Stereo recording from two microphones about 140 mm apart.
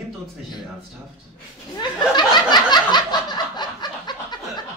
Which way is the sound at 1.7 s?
30° left (ahead or behind).